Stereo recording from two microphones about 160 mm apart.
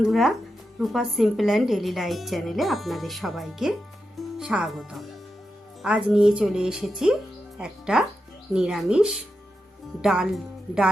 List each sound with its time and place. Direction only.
0.0 s a woman's voice: centre (ahead or behind)